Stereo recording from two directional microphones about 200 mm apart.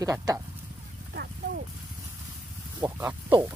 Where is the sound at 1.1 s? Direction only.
55° right (ahead or behind).